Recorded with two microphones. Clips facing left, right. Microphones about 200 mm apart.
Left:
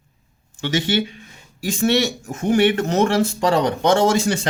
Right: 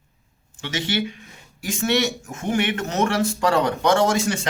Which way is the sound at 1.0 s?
30° left (ahead or behind).